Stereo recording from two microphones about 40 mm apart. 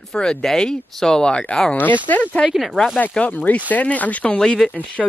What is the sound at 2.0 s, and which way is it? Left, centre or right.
Speech, left.